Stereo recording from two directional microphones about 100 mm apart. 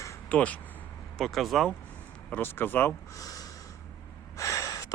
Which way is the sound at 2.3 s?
20° left (ahead or behind).